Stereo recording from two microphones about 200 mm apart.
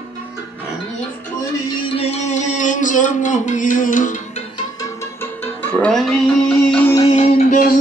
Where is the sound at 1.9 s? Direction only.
30° left (ahead or behind).